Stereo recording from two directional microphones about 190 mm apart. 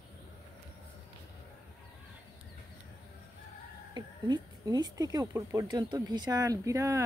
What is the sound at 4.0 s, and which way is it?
Speech, 20° right (ahead or behind).